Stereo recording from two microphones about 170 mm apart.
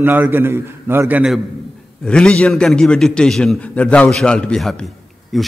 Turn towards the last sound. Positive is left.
turn(degrees=0)  # may be behind; listen again after turning